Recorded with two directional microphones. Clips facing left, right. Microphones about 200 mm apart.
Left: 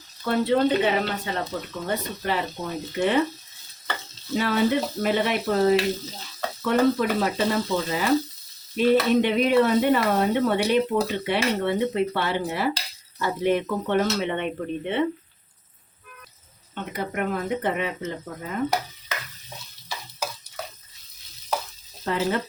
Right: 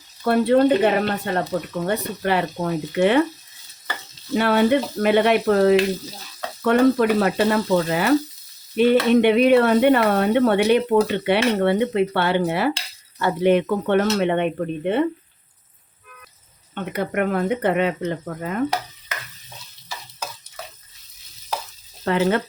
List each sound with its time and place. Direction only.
0.3 s speech: 55° right (ahead or behind)
1.8 s speech: 65° right (ahead or behind)
4.4 s speech: 65° right (ahead or behind)
16.9 s speech: 70° right (ahead or behind)
22.0 s frying: 70° right (ahead or behind)